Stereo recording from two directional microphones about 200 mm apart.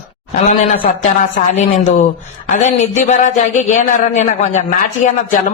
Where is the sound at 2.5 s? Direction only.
35° left (ahead or behind).